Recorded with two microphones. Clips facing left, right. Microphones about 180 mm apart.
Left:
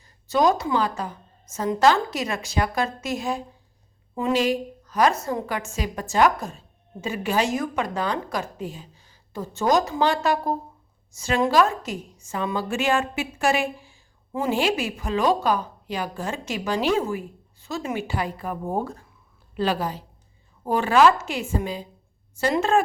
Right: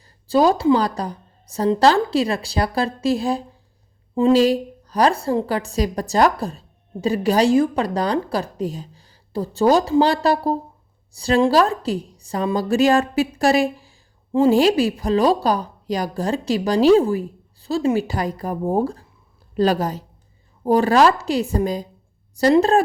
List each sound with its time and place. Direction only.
0.3 s a woman's voice: 30° right (ahead or behind)